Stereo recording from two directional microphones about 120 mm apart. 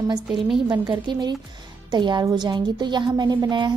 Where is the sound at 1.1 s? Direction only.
40° right (ahead or behind).